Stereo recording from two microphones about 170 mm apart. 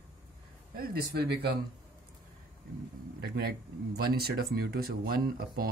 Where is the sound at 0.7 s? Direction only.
70° right (ahead or behind).